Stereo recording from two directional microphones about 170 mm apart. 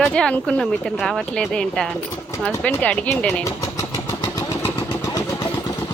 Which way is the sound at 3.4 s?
20° left (ahead or behind).